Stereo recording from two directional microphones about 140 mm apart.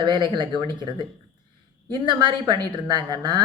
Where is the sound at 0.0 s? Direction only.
35° right (ahead or behind).